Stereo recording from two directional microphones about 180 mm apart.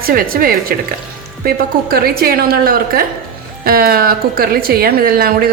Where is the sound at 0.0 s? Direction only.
55° right (ahead or behind).